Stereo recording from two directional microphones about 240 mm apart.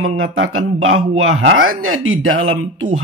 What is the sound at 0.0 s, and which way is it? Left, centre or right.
Speech, right.